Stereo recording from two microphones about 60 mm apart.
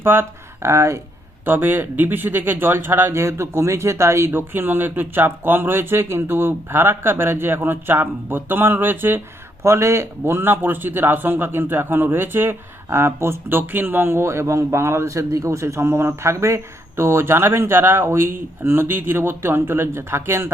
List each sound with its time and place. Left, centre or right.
0.0 s speech: right
1.5 s speech: right
9.6 s a man's voice: right